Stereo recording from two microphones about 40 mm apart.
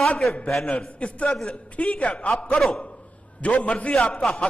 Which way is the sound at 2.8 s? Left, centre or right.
Left.